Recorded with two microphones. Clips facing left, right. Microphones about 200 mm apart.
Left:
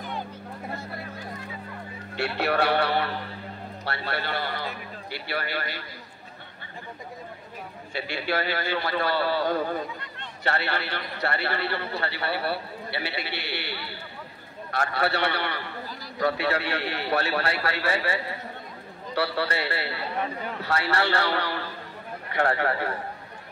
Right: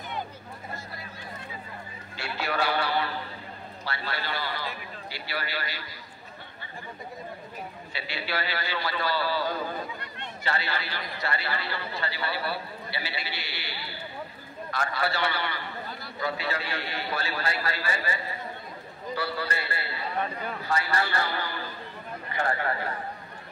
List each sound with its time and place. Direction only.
2.1 s a man's voice: 65° left (ahead or behind)
7.9 s a man's voice: 50° left (ahead or behind); by 22.8 s 70° left (ahead or behind)